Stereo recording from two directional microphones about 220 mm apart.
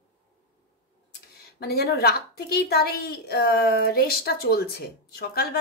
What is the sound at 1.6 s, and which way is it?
A woman's voice, 45° left (ahead or behind).